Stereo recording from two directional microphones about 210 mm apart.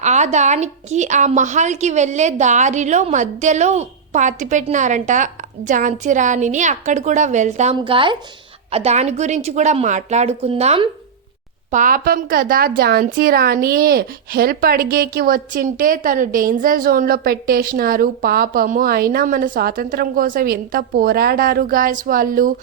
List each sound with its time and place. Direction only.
0.0 s a woman's voice: 35° right (ahead or behind)
11.7 s a woman's voice: 40° right (ahead or behind)